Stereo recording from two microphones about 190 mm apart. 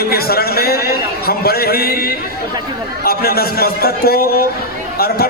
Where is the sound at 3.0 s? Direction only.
55° left (ahead or behind).